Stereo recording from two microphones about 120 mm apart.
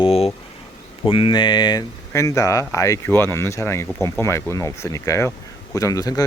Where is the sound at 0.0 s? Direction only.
55° left (ahead or behind).